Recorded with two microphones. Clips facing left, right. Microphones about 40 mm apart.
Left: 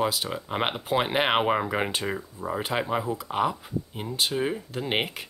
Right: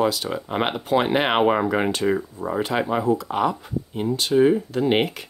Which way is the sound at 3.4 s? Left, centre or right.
Centre.